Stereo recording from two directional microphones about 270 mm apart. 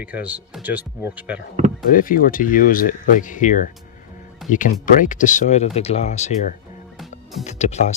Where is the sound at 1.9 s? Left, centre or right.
Left.